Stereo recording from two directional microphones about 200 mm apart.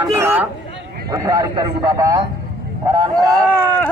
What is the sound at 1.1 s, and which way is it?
Speech, 15° right (ahead or behind).